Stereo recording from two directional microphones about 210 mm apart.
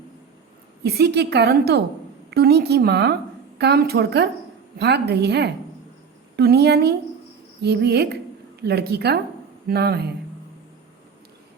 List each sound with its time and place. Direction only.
0.8 s a woman's voice: 50° right (ahead or behind)